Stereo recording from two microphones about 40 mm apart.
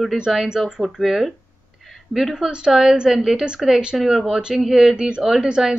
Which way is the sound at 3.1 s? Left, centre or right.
Centre.